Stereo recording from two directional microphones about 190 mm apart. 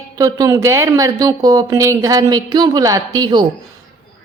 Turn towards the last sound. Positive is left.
turn(degrees=-20)  # may be behind; listen again after turning